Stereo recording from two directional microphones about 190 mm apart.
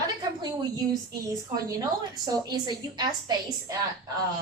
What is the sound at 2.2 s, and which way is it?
A woman's voice, 20° right (ahead or behind).